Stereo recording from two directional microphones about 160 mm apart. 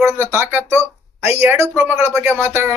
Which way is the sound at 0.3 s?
15° right (ahead or behind).